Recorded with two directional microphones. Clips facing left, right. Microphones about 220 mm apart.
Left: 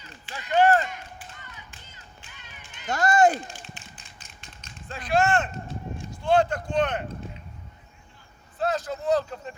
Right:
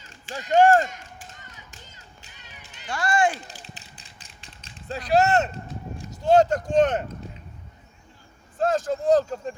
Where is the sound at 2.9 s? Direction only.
40° left (ahead or behind).